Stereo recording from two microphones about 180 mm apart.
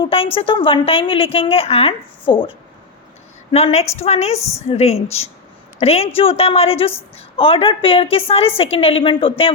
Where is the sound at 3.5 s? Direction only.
35° left (ahead or behind).